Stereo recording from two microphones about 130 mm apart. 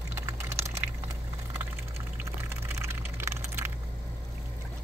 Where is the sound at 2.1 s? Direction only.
20° right (ahead or behind).